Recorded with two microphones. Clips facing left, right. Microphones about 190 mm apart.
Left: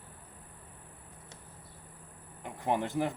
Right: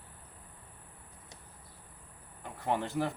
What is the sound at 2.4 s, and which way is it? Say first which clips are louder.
Speech: left 2 dB; 15° left (ahead or behind).